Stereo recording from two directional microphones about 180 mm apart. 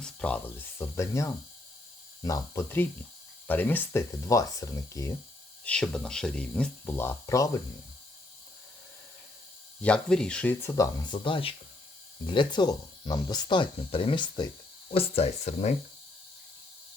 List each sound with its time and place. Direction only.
0.0 s speech: 5° left (ahead or behind)
5.6 s speech: 5° left (ahead or behind)
9.8 s speech: 5° left (ahead or behind); by 14.5 s 25° left (ahead or behind)
14.9 s speech: 35° left (ahead or behind)